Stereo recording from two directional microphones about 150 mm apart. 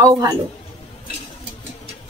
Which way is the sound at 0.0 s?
20° right (ahead or behind).